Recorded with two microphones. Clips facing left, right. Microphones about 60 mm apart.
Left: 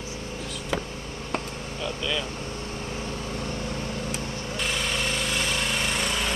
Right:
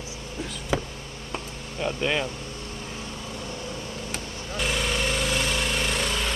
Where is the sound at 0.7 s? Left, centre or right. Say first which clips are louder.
Right 2 dB; centre.